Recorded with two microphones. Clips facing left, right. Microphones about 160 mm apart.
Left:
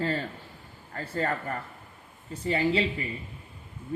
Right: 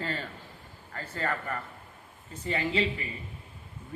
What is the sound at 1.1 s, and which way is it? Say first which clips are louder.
A man's voice: left 3 dB; 35° left (ahead or behind).